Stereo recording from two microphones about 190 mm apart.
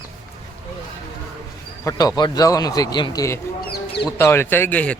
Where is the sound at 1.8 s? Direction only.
20° left (ahead or behind).